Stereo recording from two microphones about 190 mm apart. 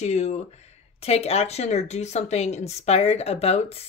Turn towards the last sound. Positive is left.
turn(degrees=35)  # may be behind; listen again after turning